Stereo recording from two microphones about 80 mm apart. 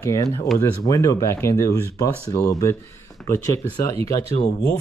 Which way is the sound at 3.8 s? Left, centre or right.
Left.